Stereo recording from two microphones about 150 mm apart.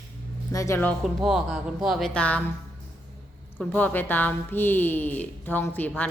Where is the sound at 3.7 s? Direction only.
10° left (ahead or behind).